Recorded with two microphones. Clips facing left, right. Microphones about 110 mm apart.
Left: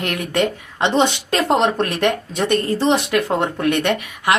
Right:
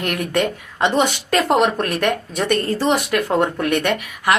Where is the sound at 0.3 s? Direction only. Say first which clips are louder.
Left 2 dB; 20° left (ahead or behind).